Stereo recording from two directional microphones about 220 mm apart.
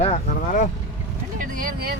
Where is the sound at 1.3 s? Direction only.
40° right (ahead or behind).